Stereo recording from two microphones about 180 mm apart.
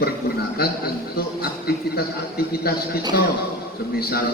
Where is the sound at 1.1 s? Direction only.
60° left (ahead or behind).